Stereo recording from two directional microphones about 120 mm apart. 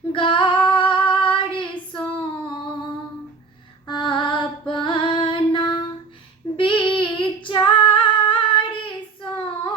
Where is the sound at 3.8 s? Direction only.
40° left (ahead or behind).